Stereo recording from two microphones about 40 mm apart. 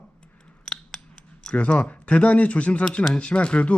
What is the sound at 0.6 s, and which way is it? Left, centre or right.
Scissors, centre.